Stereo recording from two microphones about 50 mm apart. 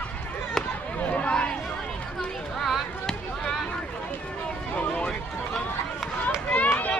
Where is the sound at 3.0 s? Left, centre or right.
Centre.